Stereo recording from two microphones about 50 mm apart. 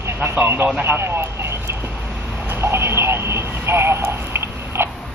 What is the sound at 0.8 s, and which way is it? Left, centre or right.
Telephone, right.